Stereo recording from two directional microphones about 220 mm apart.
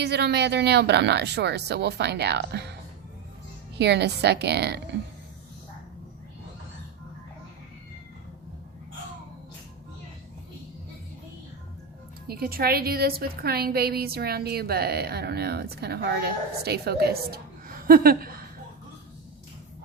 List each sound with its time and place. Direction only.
0.0 s a woman's voice: 50° right (ahead or behind)
3.8 s a woman's voice: 50° right (ahead or behind)
12.3 s a woman's voice: 45° right (ahead or behind)